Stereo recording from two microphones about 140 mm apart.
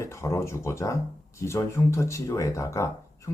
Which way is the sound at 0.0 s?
20° left (ahead or behind).